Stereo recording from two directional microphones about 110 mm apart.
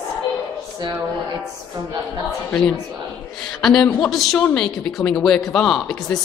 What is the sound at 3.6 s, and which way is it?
Speech, 5° left (ahead or behind).